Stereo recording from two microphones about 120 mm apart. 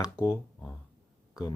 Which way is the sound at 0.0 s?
25° left (ahead or behind).